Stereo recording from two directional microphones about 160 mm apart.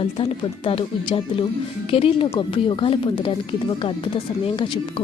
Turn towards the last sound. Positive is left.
turn(degrees=35)  # may be behind; listen again after turning